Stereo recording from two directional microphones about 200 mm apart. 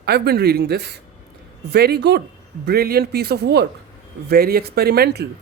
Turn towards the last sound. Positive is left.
turn(degrees=-50)  # may be behind; listen again after turning